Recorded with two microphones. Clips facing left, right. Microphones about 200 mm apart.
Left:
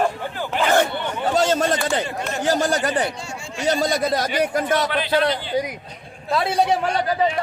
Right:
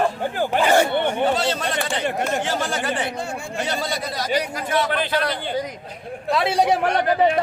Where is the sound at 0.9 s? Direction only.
60° right (ahead or behind).